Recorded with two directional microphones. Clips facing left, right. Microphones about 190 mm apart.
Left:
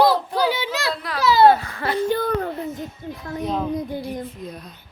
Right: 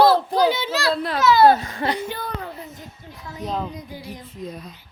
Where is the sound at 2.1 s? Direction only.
50° left (ahead or behind).